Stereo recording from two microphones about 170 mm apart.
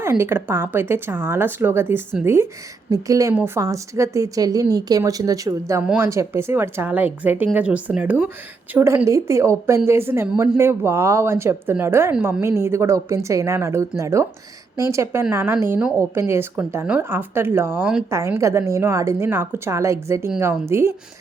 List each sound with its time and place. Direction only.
0.0 s a woman's voice: 15° right (ahead or behind)
5.8 s speech: 5° right (ahead or behind)
6.1 s speech: 15° right (ahead or behind)